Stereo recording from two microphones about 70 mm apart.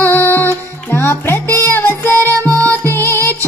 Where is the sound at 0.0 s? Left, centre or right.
Left.